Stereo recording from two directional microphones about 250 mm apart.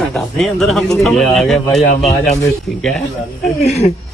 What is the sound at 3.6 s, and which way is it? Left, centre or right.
Speech, left.